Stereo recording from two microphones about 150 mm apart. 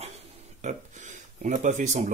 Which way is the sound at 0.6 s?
55° right (ahead or behind).